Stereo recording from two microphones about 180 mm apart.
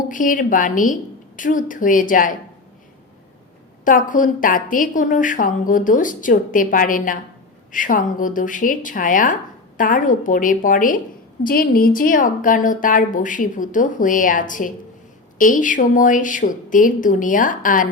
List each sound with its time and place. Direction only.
0.1 s speech: 45° left (ahead or behind)
3.8 s speech: 45° left (ahead or behind)